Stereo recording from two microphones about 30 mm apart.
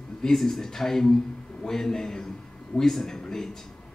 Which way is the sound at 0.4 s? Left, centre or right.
Centre.